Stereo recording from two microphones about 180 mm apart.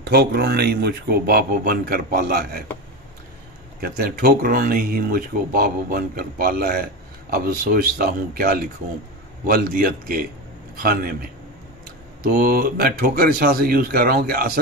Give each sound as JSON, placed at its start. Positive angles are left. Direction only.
{"t": 0.0, "sound": "speech", "side_deg": -60}
{"t": 3.8, "sound": "a man's voice", "side_deg": -55}
{"t": 12.2, "sound": "speech", "side_deg": -55}